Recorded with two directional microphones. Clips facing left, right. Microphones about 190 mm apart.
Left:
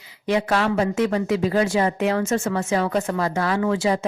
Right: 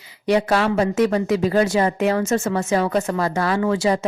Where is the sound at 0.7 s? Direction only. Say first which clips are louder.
Right 3 dB; 40° right (ahead or behind).